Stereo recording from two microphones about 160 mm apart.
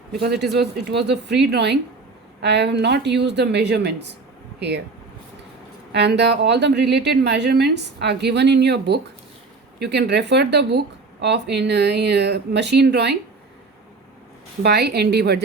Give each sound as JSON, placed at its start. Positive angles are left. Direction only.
{"t": 0.1, "sound": "speech", "side_deg": -90}
{"t": 5.9, "sound": "speech", "side_deg": -90}
{"t": 14.6, "sound": "speech", "side_deg": -90}